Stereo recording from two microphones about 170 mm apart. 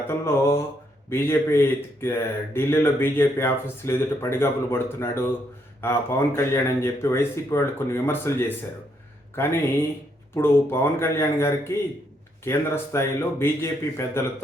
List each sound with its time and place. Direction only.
0.1 s speech: 15° left (ahead or behind)